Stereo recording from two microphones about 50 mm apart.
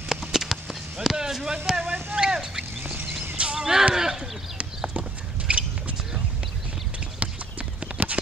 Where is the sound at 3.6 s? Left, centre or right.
Centre.